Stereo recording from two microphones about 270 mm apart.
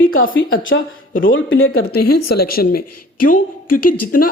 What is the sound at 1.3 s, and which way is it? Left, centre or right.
Speech, left.